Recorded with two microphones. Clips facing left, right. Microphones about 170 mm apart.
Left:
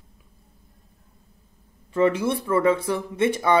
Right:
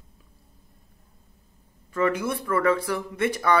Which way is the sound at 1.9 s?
25° left (ahead or behind).